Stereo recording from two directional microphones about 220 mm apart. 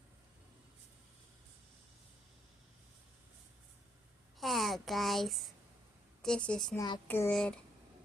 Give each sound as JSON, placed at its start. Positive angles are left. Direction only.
{"t": 4.4, "sound": "a sound", "side_deg": 0}
{"t": 6.2, "sound": "a woman's voice", "side_deg": 5}
{"t": 6.7, "sound": "speech", "side_deg": 20}
{"t": 7.1, "sound": "speech", "side_deg": 10}